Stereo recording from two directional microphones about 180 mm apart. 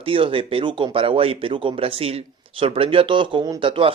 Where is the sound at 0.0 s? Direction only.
30° right (ahead or behind).